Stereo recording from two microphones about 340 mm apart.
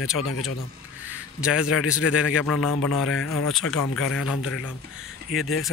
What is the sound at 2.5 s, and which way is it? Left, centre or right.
Speech, left.